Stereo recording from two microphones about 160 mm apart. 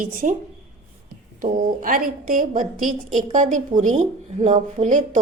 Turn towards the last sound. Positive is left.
turn(degrees=-50)  # may be behind; listen again after turning